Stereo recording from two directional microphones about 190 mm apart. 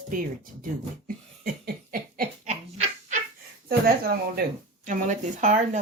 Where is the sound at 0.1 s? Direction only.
45° right (ahead or behind).